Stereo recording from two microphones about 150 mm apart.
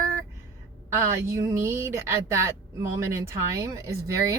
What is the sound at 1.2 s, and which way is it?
A woman's voice, 20° right (ahead or behind).